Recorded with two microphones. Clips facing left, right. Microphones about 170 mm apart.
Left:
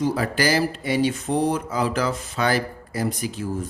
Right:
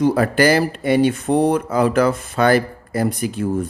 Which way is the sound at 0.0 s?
55° right (ahead or behind).